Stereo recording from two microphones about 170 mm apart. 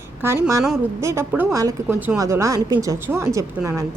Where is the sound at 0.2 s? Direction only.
15° right (ahead or behind).